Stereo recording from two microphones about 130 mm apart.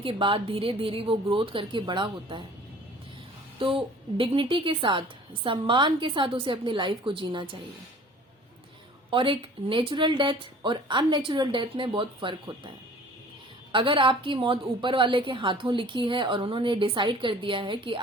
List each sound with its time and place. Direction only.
0.0 s a woman's voice: 40° right (ahead or behind)
4.2 s a woman's voice: 40° right (ahead or behind)
9.0 s a woman's voice: 40° right (ahead or behind)
13.7 s a woman's voice: 40° right (ahead or behind)